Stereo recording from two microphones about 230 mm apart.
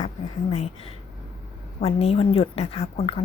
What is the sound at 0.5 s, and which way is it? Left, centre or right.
A woman's voice, left.